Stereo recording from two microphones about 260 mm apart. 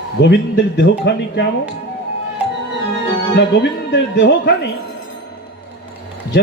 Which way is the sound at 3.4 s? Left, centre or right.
Left.